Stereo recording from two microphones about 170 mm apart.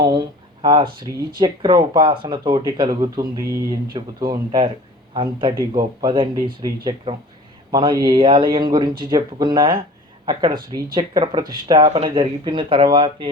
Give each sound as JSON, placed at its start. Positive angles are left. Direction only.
{"t": 0.6, "sound": "speech", "side_deg": -30}